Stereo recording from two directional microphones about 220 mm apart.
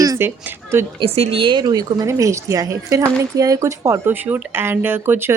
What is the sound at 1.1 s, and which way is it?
A woman's voice, 25° right (ahead or behind).